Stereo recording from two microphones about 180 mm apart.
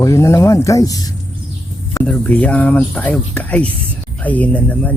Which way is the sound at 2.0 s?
5° left (ahead or behind).